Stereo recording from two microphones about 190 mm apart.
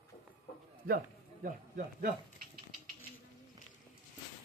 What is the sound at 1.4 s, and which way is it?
Speech, 50° right (ahead or behind).